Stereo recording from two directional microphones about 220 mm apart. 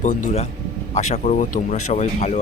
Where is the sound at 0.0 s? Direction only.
35° left (ahead or behind).